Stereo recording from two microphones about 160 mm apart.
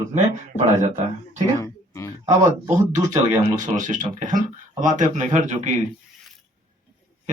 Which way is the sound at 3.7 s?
55° right (ahead or behind).